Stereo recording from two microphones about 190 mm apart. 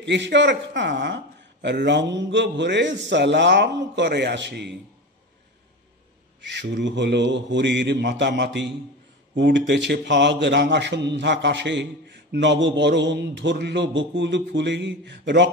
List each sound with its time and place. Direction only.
0.0 s speech: 65° right (ahead or behind)
6.4 s speech: 70° right (ahead or behind)